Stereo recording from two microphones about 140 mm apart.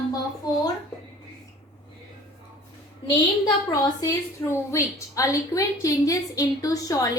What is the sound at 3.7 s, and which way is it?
A woman's voice, 25° left (ahead or behind).